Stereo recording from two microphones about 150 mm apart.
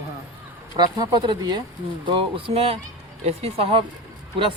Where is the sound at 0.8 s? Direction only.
30° right (ahead or behind).